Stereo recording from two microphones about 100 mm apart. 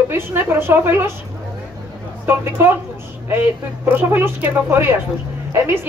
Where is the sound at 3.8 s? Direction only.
20° right (ahead or behind).